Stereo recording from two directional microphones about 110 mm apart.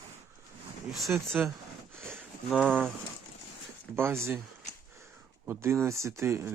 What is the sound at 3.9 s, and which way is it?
Speech, 20° right (ahead or behind).